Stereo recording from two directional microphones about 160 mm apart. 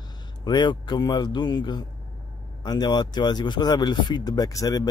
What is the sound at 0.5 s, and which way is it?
Speech, 30° left (ahead or behind).